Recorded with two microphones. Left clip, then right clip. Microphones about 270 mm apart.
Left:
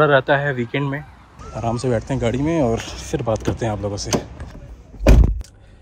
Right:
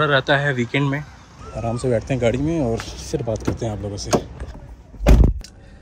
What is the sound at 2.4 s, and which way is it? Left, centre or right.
Speech, left.